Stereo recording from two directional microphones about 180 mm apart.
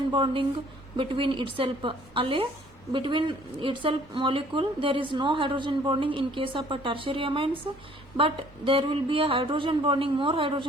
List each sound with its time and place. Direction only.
0.1 s a woman's voice: 25° right (ahead or behind)